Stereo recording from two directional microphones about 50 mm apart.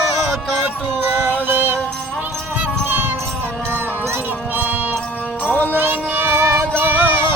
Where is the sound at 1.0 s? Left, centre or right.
Right.